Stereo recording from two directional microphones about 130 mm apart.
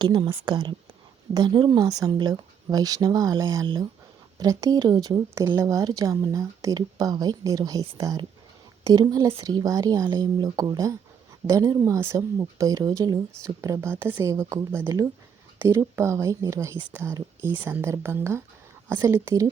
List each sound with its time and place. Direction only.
0.0 s a woman's voice: 40° right (ahead or behind)
11.4 s a woman's voice: 55° right (ahead or behind)
11.8 s speech: 20° right (ahead or behind)